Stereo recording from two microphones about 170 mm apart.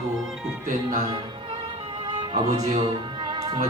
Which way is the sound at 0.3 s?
5° right (ahead or behind).